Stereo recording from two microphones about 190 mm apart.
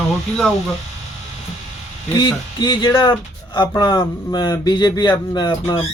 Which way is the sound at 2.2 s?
20° left (ahead or behind).